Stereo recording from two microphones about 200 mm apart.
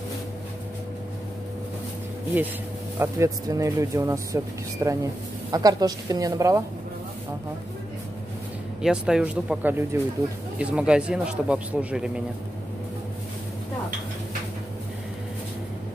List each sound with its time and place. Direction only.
3.0 s speech: 15° right (ahead or behind)
8.8 s speech: 5° right (ahead or behind)